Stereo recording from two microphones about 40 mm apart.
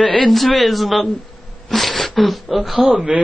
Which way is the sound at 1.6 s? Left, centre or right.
Centre.